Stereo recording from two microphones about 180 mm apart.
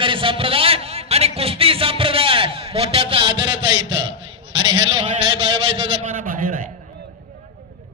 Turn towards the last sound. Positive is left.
turn(degrees=-45)  # may be behind; listen again after turning